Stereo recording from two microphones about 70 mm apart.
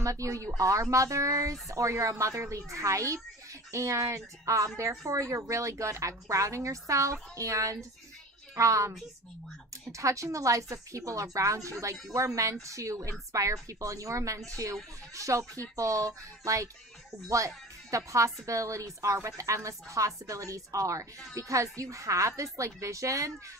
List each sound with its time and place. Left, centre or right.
0.0 s a woman's voice: right
9.9 s a woman's voice: right
17.9 s a woman's voice: right